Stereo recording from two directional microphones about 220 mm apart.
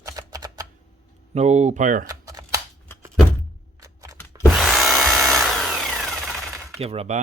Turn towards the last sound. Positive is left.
turn(degrees=-25)  # may be behind; listen again after turning